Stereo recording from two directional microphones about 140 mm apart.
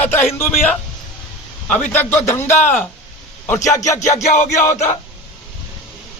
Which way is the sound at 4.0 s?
55° left (ahead or behind).